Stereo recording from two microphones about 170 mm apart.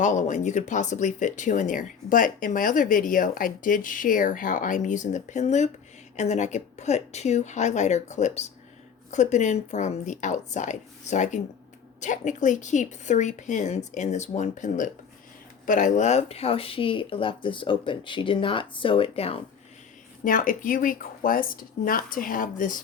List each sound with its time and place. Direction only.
0.0 s speech: 45° left (ahead or behind)
20.2 s speech: 55° left (ahead or behind)